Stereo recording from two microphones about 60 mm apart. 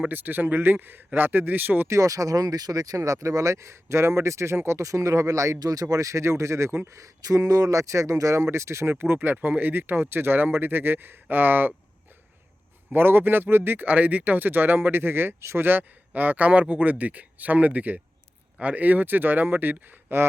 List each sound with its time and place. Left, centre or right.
0.1 s speech: right
1.9 s speech: right
7.0 s speech: right
12.9 s speech: right
15.6 s speech: right